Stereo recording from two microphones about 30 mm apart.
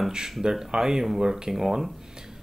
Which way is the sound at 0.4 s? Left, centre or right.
Right.